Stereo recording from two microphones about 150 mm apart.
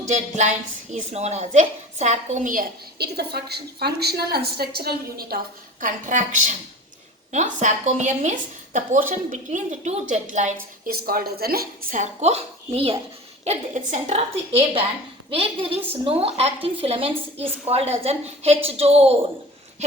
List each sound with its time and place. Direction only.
0.1 s a woman's voice: 50° right (ahead or behind); by 5.4 s 90° right
5.8 s a woman's voice: 60° right (ahead or behind)
10.8 s a woman's voice: 85° right; by 19.1 s 45° right (ahead or behind)